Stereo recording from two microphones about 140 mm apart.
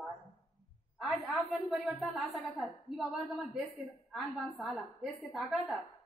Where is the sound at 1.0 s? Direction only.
Centre (ahead or behind).